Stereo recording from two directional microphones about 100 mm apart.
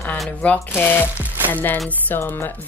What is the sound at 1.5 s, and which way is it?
Speech, 20° left (ahead or behind).